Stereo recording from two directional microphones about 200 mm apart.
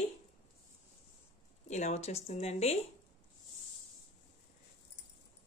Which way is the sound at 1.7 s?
35° left (ahead or behind).